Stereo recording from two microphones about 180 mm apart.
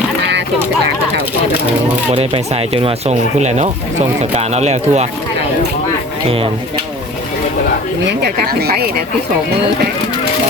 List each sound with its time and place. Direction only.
0.2 s a sound: 70° right (ahead or behind)
2.1 s speech: 35° right (ahead or behind)
6.2 s speech: 30° right (ahead or behind)
8.2 s speech: 60° right (ahead or behind)